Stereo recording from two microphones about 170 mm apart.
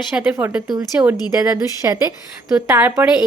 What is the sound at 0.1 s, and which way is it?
A woman's voice, 10° right (ahead or behind).